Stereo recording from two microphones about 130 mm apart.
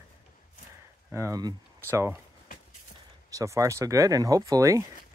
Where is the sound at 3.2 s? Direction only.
25° right (ahead or behind).